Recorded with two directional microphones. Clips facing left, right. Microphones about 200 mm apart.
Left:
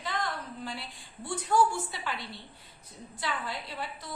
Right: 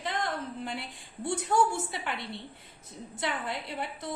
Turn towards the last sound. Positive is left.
turn(degrees=-20)  # may be behind; listen again after turning